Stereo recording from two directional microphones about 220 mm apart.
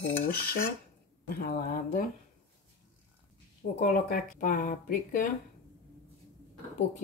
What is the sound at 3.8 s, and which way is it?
Speech, 35° left (ahead or behind).